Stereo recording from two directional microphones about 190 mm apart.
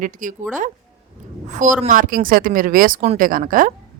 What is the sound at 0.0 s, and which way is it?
Speech, 45° right (ahead or behind).